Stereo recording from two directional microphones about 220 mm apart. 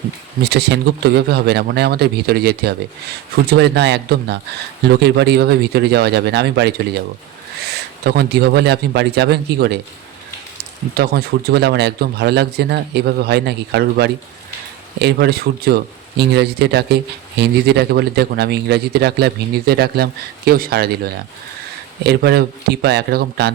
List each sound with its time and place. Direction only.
0.4 s speech: 45° right (ahead or behind)